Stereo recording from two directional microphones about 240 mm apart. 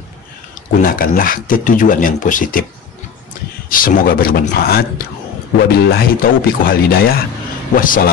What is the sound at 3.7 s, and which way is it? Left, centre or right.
Speech, left.